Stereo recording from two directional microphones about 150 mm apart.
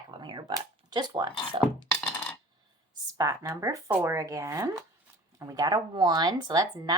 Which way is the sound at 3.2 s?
20° right (ahead or behind).